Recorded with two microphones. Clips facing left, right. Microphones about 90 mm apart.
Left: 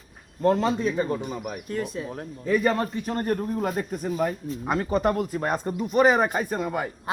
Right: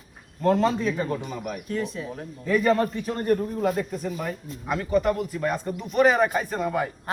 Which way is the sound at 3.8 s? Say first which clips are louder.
Left 3 dB; 35° left (ahead or behind).